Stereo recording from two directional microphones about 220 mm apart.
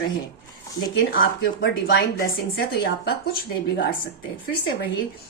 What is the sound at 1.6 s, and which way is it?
Speech, 45° left (ahead or behind).